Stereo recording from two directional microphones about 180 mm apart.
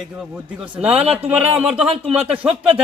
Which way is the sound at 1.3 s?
5° right (ahead or behind).